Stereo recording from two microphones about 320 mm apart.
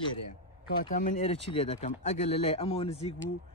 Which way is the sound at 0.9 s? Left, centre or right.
Left.